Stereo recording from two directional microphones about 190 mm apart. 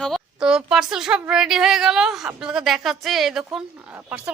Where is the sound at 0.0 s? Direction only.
Centre (ahead or behind).